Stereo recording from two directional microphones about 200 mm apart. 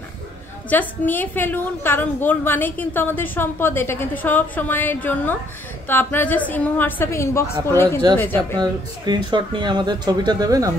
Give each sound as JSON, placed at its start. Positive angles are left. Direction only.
{"t": 0.7, "sound": "a woman's voice", "side_deg": 10}
{"t": 8.5, "sound": "speech", "side_deg": -20}